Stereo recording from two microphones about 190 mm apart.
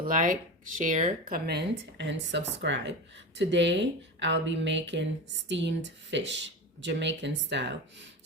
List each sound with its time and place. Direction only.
0.0 s speech: 45° right (ahead or behind)
1.5 s speech: 65° right (ahead or behind)